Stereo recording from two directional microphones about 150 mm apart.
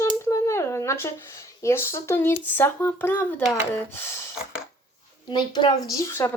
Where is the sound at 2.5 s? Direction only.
15° left (ahead or behind).